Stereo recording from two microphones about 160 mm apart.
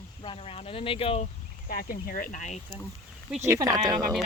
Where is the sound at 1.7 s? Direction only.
65° left (ahead or behind); by 2.6 s 50° left (ahead or behind).